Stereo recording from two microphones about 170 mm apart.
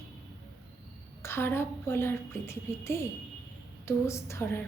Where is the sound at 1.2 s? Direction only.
15° left (ahead or behind).